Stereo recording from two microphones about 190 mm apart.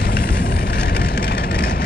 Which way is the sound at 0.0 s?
55° left (ahead or behind).